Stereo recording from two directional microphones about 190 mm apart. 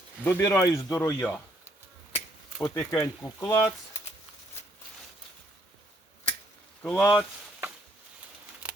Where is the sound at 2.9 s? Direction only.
15° left (ahead or behind).